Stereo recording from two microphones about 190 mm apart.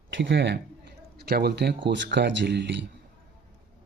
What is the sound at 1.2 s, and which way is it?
Speech, 55° right (ahead or behind).